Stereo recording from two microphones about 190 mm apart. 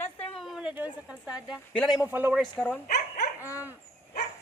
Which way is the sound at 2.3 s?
5° left (ahead or behind).